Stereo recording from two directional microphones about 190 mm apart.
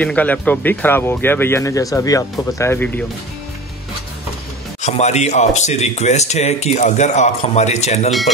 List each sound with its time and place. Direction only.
0.0 s speech: 5° left (ahead or behind)
4.8 s speech: 35° left (ahead or behind)